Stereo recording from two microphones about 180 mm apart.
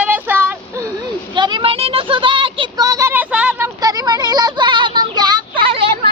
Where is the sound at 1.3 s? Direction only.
25° right (ahead or behind); by 3.7 s 5° right (ahead or behind).